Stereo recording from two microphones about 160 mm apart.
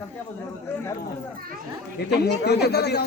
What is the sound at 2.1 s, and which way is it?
Speech, 90° left.